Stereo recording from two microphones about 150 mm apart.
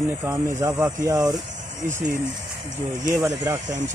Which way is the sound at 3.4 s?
25° right (ahead or behind).